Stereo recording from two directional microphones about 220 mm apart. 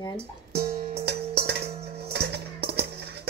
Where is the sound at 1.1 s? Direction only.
50° right (ahead or behind).